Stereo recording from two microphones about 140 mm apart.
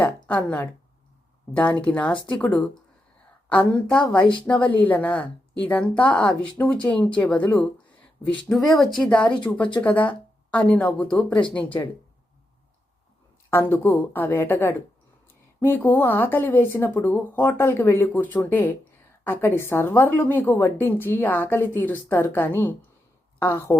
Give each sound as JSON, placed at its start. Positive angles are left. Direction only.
{"t": 0.0, "sound": "a woman's voice", "side_deg": 10}
{"t": 13.5, "sound": "a woman's voice", "side_deg": 15}